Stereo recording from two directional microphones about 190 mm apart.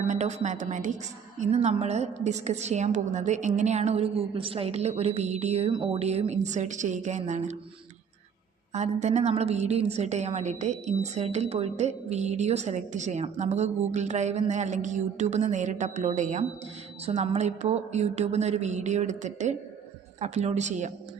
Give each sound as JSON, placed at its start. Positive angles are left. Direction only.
{"t": 0.1, "sound": "a woman's voice", "side_deg": -35}
{"t": 8.7, "sound": "a woman's voice", "side_deg": -35}